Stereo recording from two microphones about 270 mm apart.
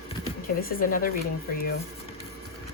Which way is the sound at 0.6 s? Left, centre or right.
Left.